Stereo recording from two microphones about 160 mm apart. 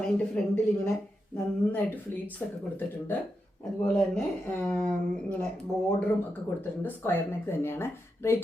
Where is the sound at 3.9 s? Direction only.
5° left (ahead or behind).